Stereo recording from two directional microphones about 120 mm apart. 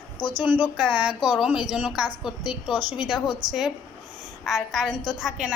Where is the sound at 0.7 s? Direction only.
10° right (ahead or behind).